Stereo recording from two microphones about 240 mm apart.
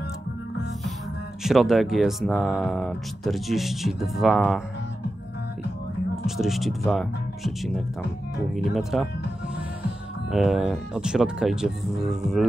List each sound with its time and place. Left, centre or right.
1.4 s speech: centre
6.2 s speech: centre